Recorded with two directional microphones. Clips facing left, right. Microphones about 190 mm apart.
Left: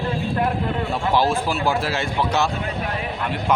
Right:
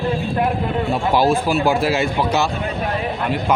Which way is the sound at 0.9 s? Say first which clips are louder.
Right 4 dB; 10° right (ahead or behind).